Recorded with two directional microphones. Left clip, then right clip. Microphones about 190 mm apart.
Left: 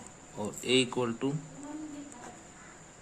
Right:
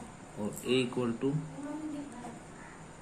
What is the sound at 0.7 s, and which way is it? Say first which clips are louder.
Mantra: left 3 dB; 70° left (ahead or behind).